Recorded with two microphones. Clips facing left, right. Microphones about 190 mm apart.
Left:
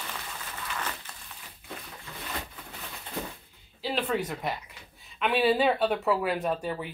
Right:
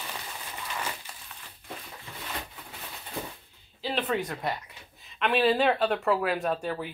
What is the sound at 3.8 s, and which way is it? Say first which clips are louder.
Speech: even; centre (ahead or behind).